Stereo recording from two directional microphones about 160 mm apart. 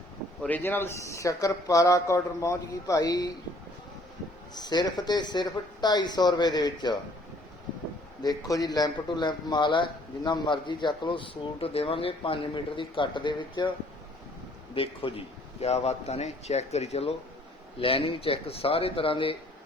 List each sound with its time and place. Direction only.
0.4 s a man's voice: 10° left (ahead or behind)
4.5 s a man's voice: 25° left (ahead or behind)
8.4 s a man's voice: 25° left (ahead or behind)
14.8 s a man's voice: 35° left (ahead or behind)